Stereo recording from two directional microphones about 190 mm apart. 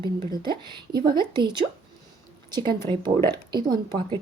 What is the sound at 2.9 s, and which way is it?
A woman's voice, 25° right (ahead or behind).